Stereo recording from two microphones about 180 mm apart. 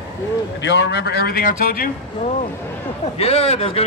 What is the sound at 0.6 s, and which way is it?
A man's voice, 75° left (ahead or behind).